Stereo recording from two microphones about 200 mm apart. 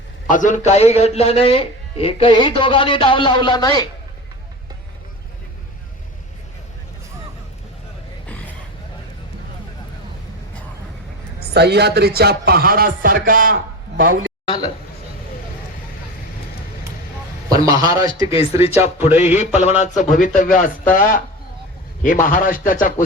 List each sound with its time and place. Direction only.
0.3 s a man's voice: 40° left (ahead or behind); by 3.8 s 20° left (ahead or behind)
11.3 s a man's voice: 55° right (ahead or behind)
17.5 s a man's voice: 20° right (ahead or behind)
18.3 s speech: 30° left (ahead or behind)
18.8 s a man's voice: 10° right (ahead or behind)
19.2 s a man's voice: 35° left (ahead or behind)